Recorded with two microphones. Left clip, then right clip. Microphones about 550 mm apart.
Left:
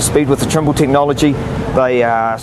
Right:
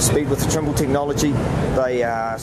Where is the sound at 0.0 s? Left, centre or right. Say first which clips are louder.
Left 6 dB; left.